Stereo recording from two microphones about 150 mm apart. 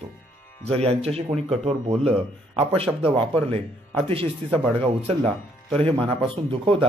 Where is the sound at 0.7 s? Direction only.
40° right (ahead or behind).